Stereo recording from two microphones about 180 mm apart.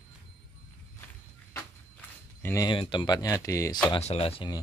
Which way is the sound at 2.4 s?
15° left (ahead or behind).